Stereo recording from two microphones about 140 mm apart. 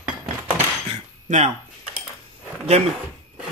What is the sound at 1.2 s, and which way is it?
Speech, 55° right (ahead or behind).